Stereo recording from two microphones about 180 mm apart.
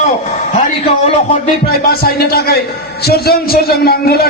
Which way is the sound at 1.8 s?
60° left (ahead or behind).